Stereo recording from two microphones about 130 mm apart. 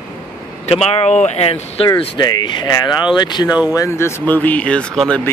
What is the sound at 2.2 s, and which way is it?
Speech, 35° left (ahead or behind).